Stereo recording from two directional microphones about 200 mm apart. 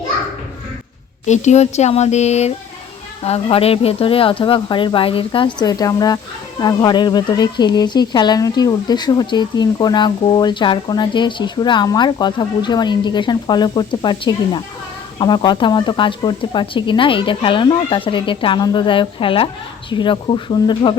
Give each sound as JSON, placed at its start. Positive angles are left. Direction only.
{"t": 1.2, "sound": "speech", "side_deg": 35}